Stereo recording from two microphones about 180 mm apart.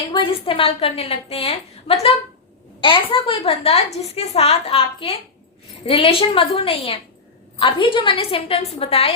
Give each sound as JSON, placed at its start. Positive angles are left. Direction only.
{"t": 0.1, "sound": "a woman's voice", "side_deg": 30}